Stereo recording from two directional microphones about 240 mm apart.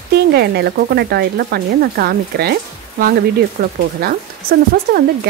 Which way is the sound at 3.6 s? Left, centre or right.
Right.